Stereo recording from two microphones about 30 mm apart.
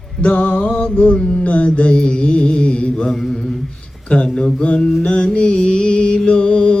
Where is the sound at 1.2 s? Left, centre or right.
Left.